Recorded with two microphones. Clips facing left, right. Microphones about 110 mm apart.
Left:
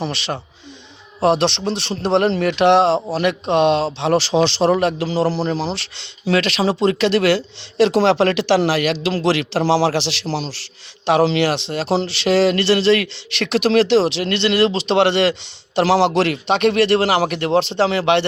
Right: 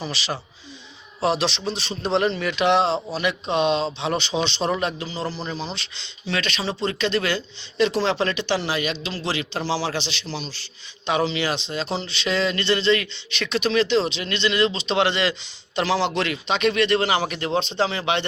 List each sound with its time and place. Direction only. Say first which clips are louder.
0.0 s speech: left 5 dB; 60° left (ahead or behind)
4.7 s speech: left 8 dB; 60° left (ahead or behind); by 5.2 s 75° left (ahead or behind)
5.3 s a man's voice: left 9 dB; 90° left
9.2 s speech: left 8 dB; 90° left
9.7 s a man's voice: left 9 dB; 90° left
11.0 s speech: left 7 dB; 70° left (ahead or behind)
15.9 s speech: left 7 dB; 75° left (ahead or behind)